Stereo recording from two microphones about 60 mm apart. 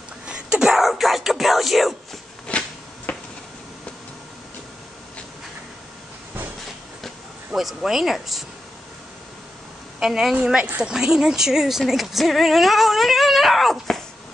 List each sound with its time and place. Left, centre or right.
0.3 s speech: centre
2.5 s a sound: centre
7.5 s speech: centre
9.9 s a woman's voice: centre
10.4 s speech: centre